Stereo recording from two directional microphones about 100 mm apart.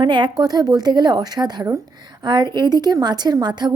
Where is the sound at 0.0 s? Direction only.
50° right (ahead or behind).